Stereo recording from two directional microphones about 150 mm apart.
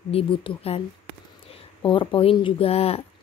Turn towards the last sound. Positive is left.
turn(degrees=40)  # may be behind; listen again after turning